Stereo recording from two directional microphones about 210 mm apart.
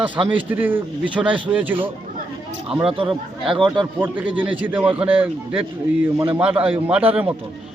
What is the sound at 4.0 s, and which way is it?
Speech, 5° right (ahead or behind).